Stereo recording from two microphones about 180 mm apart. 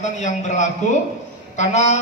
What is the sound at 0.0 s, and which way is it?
A man's voice, 40° left (ahead or behind).